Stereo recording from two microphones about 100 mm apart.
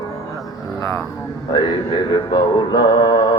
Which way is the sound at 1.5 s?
50° left (ahead or behind).